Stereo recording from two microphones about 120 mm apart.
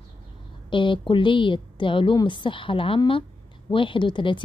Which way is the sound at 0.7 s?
45° left (ahead or behind).